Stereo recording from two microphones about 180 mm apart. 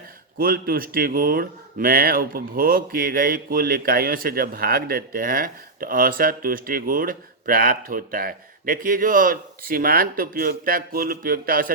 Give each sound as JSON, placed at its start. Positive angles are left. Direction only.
{"t": 0.3, "sound": "speech", "side_deg": -55}